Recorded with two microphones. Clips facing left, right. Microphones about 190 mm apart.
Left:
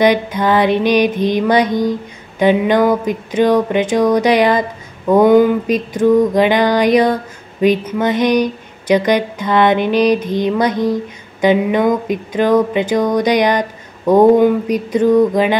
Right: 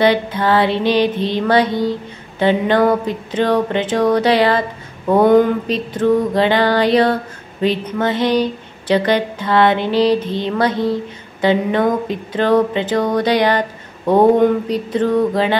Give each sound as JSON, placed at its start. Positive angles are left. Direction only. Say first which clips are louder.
{"t": 0.0, "sound": "mantra", "louder": "left 2 dB", "side_deg": 15}